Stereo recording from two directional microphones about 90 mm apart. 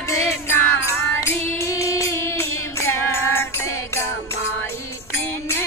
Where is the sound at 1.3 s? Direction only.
30° left (ahead or behind).